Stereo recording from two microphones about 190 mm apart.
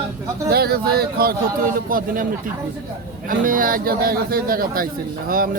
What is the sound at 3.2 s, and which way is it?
A man's voice, 45° right (ahead or behind).